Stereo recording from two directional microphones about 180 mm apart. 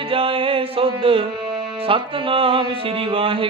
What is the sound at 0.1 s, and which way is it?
Music, 30° right (ahead or behind).